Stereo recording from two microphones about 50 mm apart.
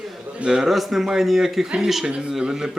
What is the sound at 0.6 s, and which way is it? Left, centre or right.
Speech, centre.